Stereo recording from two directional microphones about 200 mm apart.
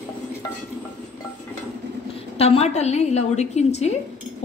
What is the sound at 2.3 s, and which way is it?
Speech, 30° left (ahead or behind).